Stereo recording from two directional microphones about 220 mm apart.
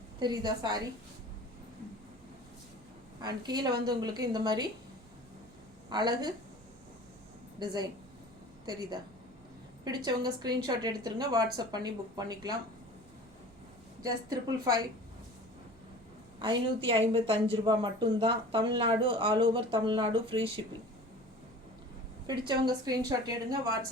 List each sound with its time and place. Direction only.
0.2 s speech: 20° right (ahead or behind)
3.2 s speech: 20° right (ahead or behind)
5.9 s speech: 20° right (ahead or behind)
7.6 s a woman's voice: 20° right (ahead or behind)
14.0 s a woman's voice: 15° right (ahead or behind)
16.4 s speech: 20° right (ahead or behind)
22.3 s a woman's voice: 20° right (ahead or behind)